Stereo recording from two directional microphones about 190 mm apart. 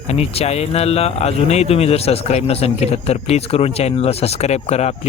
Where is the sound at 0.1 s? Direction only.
35° left (ahead or behind).